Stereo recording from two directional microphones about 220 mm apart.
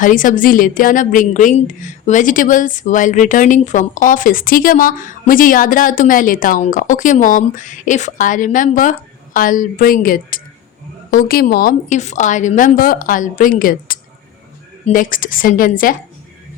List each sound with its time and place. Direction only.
0.0 s a woman's voice: 35° left (ahead or behind)